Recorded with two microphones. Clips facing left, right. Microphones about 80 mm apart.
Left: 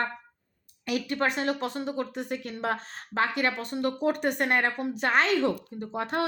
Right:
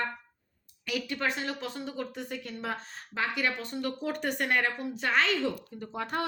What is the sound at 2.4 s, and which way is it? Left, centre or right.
Speech, left.